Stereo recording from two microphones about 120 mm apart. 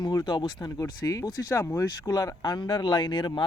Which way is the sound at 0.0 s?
35° left (ahead or behind).